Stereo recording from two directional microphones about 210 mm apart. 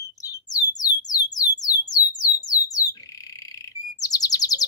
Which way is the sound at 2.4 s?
15° left (ahead or behind).